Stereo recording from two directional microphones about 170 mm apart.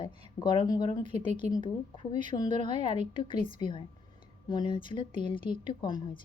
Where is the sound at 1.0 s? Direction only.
45° right (ahead or behind).